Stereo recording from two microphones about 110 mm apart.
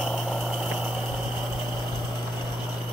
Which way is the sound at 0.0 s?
Centre (ahead or behind).